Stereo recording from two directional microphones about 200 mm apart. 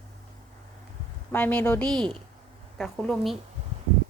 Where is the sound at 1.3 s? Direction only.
10° left (ahead or behind).